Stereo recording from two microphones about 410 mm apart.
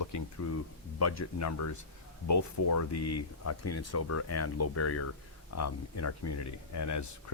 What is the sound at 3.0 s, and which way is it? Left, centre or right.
Speech, left.